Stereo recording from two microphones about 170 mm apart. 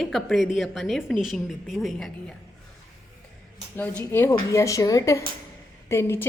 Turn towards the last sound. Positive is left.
turn(degrees=15)  # may be behind; listen again after turning